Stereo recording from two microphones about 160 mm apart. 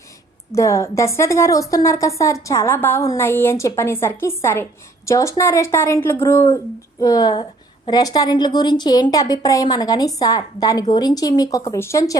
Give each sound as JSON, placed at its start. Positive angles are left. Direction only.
{"t": 0.5, "sound": "a woman's voice", "side_deg": 20}